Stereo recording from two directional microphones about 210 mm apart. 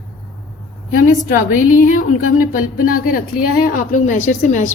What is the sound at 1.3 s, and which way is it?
A woman's voice, 40° left (ahead or behind).